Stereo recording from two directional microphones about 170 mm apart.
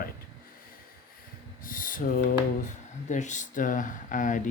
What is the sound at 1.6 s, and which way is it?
Speech, 55° left (ahead or behind).